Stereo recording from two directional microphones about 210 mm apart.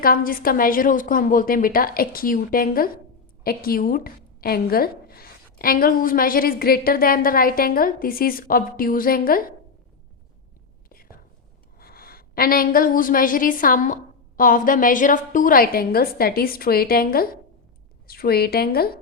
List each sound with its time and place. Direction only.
0.0 s a woman's voice: 45° left (ahead or behind)
11.8 s a woman's voice: 45° left (ahead or behind)